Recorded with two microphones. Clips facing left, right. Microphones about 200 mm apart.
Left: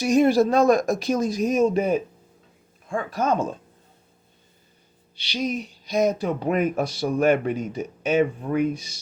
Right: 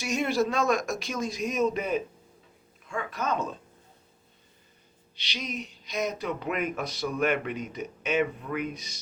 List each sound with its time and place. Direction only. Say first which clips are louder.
0.0 s speech: left 9 dB; 35° left (ahead or behind)
3.2 s speech: left 7 dB; 50° left (ahead or behind)
5.3 s speech: left 9 dB; 30° left (ahead or behind)